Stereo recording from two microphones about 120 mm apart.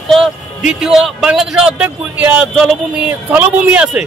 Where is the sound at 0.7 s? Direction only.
5° right (ahead or behind).